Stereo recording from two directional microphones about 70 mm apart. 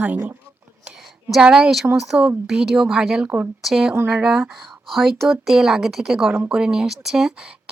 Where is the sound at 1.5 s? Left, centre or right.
Centre.